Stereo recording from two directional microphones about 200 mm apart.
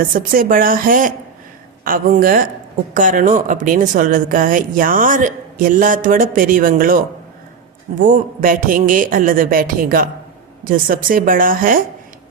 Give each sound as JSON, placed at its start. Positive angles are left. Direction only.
{"t": 0.0, "sound": "speech", "side_deg": -45}